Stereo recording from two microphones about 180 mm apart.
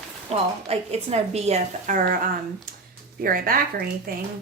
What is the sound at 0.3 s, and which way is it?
A woman's voice, 35° right (ahead or behind).